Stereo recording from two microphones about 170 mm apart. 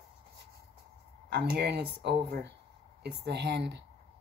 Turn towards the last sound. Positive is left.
turn(degrees=-85)